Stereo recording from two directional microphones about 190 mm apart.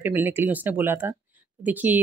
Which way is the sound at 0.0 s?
10° right (ahead or behind).